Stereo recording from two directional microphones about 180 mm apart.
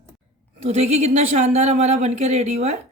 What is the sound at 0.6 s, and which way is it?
Speech, 35° right (ahead or behind).